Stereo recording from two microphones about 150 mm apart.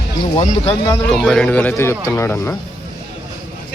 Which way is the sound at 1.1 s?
5° left (ahead or behind).